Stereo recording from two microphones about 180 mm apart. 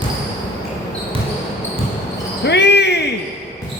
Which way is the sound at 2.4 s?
70° left (ahead or behind).